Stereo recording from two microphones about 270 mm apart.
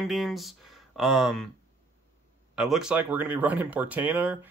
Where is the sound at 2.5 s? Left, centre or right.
Centre.